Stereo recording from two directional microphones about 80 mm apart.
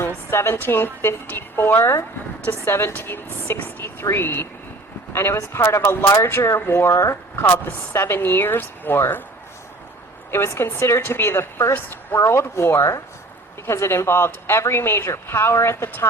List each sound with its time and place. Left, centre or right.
0.0 s a woman's voice: left
10.3 s speech: left
12.2 s speech: left